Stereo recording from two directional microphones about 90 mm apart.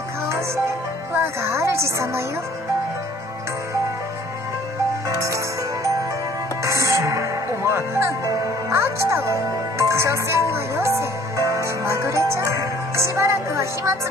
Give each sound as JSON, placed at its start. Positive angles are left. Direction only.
{"t": 1.2, "sound": "a woman's voice", "side_deg": -30}
{"t": 6.6, "sound": "music", "side_deg": -35}
{"t": 8.6, "sound": "speech", "side_deg": -30}
{"t": 10.5, "sound": "music", "side_deg": -30}